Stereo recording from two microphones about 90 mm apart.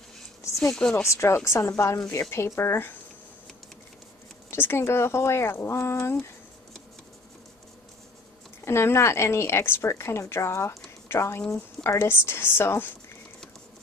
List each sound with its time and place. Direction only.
0.6 s speech: 10° left (ahead or behind)
1.0 s a woman's voice: 30° left (ahead or behind)
4.5 s speech: 25° left (ahead or behind)
8.6 s a woman's voice: 30° left (ahead or behind)